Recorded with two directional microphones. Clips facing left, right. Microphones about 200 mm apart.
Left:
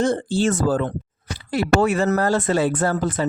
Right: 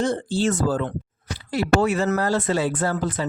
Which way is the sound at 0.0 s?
50° left (ahead or behind).